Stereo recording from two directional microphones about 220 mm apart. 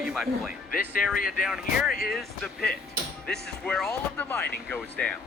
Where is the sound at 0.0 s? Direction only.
5° right (ahead or behind).